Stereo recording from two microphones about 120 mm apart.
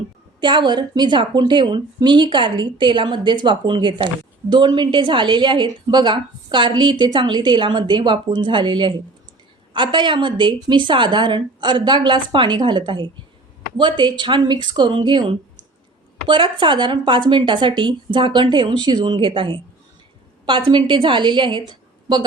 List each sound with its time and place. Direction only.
0.3 s a woman's voice: 40° right (ahead or behind)